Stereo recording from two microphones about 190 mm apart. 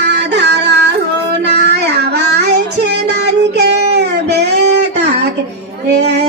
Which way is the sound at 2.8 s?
65° right (ahead or behind).